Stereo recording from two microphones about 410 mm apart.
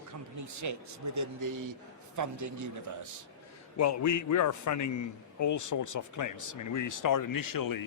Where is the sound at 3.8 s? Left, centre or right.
Left.